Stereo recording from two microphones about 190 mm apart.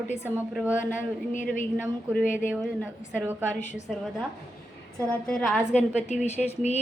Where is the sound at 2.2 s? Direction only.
45° left (ahead or behind).